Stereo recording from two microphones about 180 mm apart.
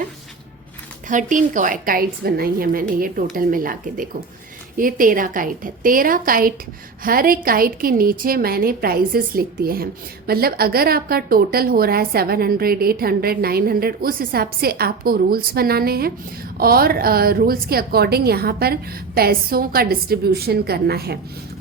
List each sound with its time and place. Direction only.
1.0 s a woman's voice: 45° right (ahead or behind); by 21.2 s 60° right (ahead or behind)